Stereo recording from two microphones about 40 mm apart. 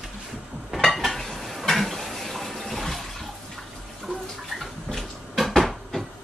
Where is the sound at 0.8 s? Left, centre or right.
Centre.